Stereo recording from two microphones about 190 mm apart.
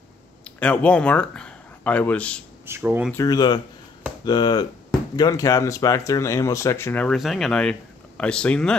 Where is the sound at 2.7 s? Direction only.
10° right (ahead or behind).